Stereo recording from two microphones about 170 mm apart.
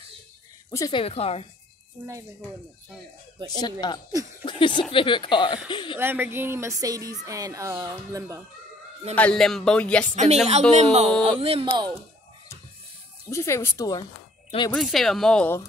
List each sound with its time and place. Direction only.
0.7 s speech: 20° left (ahead or behind)
1.0 s speech: 35° left (ahead or behind)
3.4 s speech: 25° left (ahead or behind)
4.1 s speech: 20° right (ahead or behind)
4.5 s speech: 30° left (ahead or behind)
5.9 s speech: 10° right (ahead or behind)
9.1 s music: 5° left (ahead or behind)
10.3 s speech: 40° right (ahead or behind)
13.3 s speech: 15° left (ahead or behind)
14.7 s music: centre (ahead or behind)